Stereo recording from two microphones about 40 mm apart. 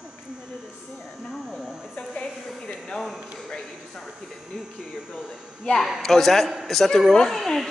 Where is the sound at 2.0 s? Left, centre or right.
Left.